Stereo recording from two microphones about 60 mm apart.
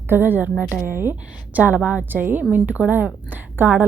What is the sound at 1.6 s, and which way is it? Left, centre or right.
A woman's voice, right.